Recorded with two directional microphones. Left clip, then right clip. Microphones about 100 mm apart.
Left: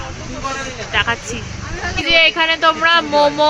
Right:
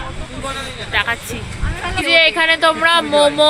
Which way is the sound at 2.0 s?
Centre (ahead or behind).